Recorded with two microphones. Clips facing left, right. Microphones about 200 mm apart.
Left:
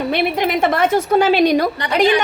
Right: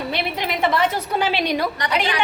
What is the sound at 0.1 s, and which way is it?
A woman's voice, 50° left (ahead or behind).